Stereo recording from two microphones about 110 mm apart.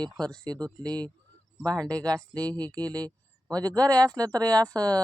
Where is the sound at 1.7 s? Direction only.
35° right (ahead or behind).